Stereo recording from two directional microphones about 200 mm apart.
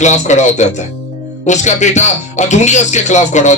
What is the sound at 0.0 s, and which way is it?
A man's voice, 35° left (ahead or behind).